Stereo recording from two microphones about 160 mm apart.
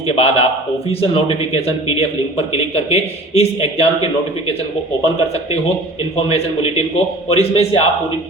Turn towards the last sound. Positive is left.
turn(degrees=40)  # may be behind; listen again after turning